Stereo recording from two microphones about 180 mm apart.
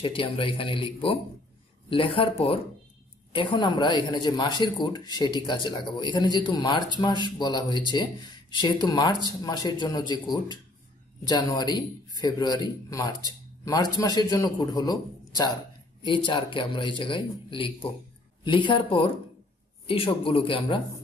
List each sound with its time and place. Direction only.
0.0 s a man's voice: 30° left (ahead or behind)